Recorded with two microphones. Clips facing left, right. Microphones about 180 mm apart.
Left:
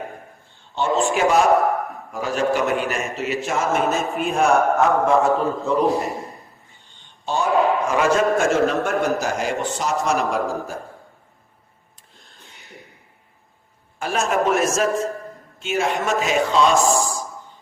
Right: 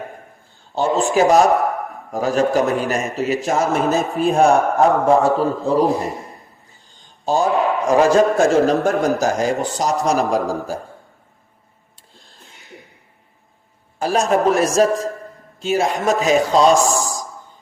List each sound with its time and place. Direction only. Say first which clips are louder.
0.8 s a man's voice: right 3 dB; 35° right (ahead or behind)
12.1 s a sound: right 2 dB; 30° right (ahead or behind)
14.0 s a man's voice: right 4 dB; 35° right (ahead or behind)